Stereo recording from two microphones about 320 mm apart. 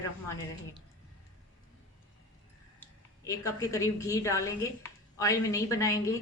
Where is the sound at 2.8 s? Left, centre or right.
Centre.